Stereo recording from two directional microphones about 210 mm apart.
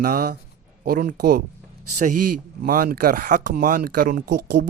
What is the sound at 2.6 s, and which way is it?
Speech, 45° right (ahead or behind).